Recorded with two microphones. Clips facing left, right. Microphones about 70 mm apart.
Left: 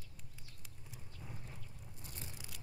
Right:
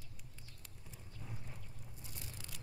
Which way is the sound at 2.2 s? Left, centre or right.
Centre.